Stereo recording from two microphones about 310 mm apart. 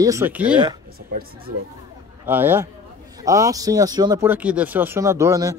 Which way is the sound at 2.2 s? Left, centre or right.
Centre.